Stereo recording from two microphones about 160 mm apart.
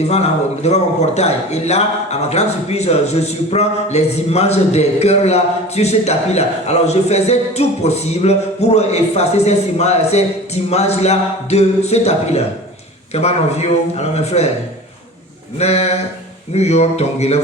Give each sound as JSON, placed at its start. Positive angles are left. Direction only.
{"t": 0.1, "sound": "a man's voice", "side_deg": 40}
{"t": 15.5, "sound": "a man's voice", "side_deg": 40}